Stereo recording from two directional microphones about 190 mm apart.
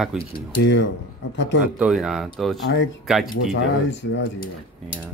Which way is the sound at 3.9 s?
70° left (ahead or behind).